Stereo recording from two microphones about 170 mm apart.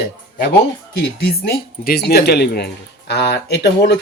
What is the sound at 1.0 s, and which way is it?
Speech, 70° left (ahead or behind).